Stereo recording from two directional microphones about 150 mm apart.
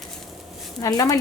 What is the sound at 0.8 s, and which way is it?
Speech, 20° left (ahead or behind).